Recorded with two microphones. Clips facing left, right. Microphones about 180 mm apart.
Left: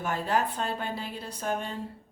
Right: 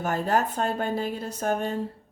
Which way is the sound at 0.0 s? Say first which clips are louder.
Right 3 dB; 45° right (ahead or behind).